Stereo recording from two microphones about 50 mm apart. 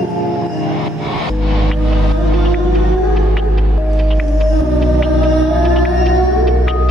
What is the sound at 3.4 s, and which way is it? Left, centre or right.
Music, centre.